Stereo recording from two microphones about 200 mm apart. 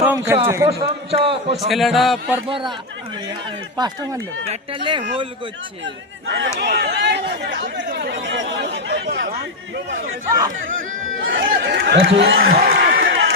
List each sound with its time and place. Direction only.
0.0 s a man's voice: 10° right (ahead or behind)
0.7 s a man's voice: 25° right (ahead or behind)
1.5 s a man's voice: centre (ahead or behind)
2.5 s a man's voice: 25° right (ahead or behind)
3.8 s a man's voice: 20° right (ahead or behind)
6.6 s speech: 55° right (ahead or behind)
11.2 s speech: 65° right (ahead or behind)